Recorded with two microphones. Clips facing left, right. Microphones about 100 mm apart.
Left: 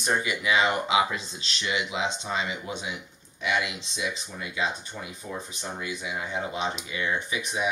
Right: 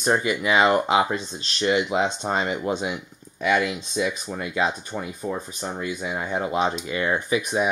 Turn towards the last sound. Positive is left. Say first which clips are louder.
# right 7 dB
turn(degrees=-45)  # may be behind; listen again after turning